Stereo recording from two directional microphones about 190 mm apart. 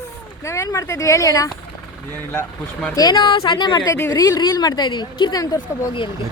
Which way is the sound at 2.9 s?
25° left (ahead or behind).